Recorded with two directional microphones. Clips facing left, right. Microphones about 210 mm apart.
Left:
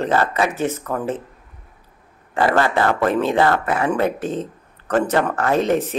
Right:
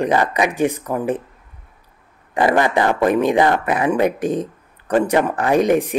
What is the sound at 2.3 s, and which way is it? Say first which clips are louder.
Speech: right 2 dB; 15° right (ahead or behind).